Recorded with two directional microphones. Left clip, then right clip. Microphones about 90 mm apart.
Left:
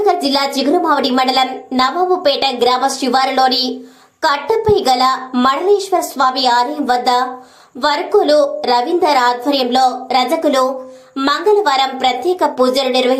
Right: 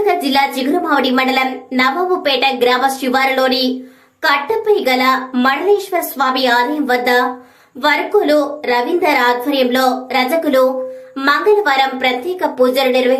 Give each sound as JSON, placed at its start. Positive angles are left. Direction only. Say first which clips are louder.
{"t": 0.0, "sound": "a woman's voice", "louder": "even", "side_deg": 25}